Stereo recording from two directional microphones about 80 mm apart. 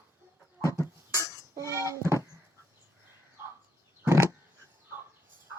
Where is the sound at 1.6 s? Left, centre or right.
Right.